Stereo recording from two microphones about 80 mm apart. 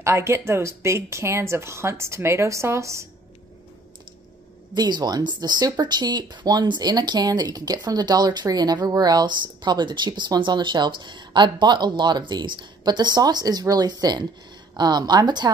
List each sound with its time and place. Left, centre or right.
0.0 s speech: right
4.7 s speech: right